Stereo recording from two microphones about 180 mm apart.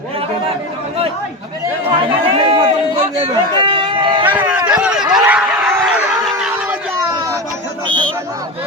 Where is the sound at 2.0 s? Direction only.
30° right (ahead or behind).